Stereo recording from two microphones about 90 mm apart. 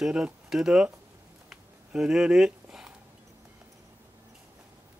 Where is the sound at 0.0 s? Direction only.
5° right (ahead or behind).